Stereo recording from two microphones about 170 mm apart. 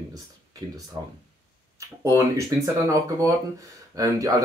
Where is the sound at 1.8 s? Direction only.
20° right (ahead or behind).